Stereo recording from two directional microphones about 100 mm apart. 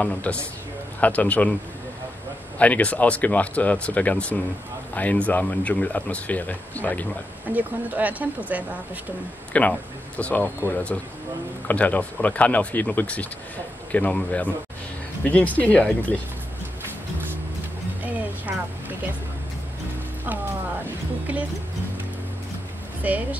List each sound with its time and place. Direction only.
0.0 s speech: 15° left (ahead or behind)
2.6 s speech: 15° left (ahead or behind)
7.4 s speech: 15° right (ahead or behind)
9.5 s speech: 15° left (ahead or behind)
11.6 s speech: 15° left (ahead or behind)
18.0 s music: 15° right (ahead or behind)
20.8 s music: 15° right (ahead or behind)
23.0 s speech: 15° right (ahead or behind)